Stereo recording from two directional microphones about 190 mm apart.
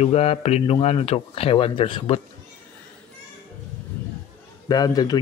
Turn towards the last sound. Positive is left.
turn(degrees=20)  # may be behind; listen again after turning